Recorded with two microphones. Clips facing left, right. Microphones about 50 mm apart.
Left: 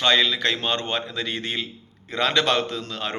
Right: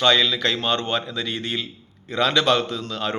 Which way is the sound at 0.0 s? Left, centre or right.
Left.